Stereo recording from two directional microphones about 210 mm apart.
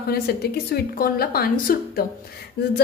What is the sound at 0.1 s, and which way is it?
A woman's voice, 50° left (ahead or behind).